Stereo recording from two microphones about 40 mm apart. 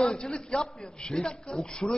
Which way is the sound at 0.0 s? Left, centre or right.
Left.